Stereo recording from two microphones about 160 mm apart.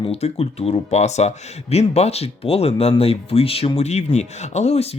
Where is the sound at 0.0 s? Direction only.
40° left (ahead or behind).